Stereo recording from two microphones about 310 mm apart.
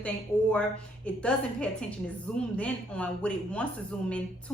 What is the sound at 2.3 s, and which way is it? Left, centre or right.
A woman's voice, centre.